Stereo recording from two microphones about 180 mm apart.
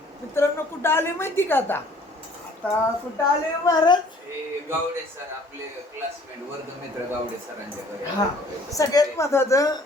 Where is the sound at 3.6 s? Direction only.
25° left (ahead or behind).